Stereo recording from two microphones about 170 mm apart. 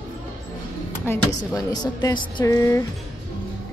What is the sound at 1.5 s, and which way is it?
Speech, 20° left (ahead or behind).